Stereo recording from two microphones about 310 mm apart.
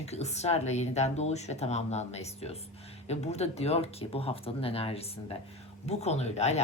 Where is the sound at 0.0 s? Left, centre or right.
Left.